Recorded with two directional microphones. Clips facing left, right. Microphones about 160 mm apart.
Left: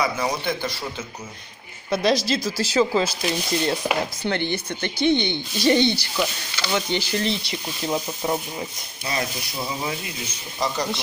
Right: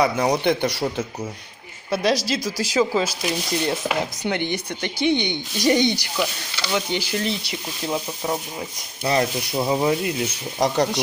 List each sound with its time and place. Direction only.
0.0 s speech: 35° right (ahead or behind)
0.5 s speech: 70° right (ahead or behind)
1.9 s speech: 10° right (ahead or behind)
9.0 s speech: 60° right (ahead or behind)
9.7 s speech: 50° right (ahead or behind)